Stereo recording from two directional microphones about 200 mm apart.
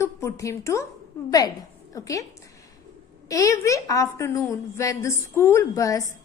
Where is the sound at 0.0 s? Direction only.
15° left (ahead or behind).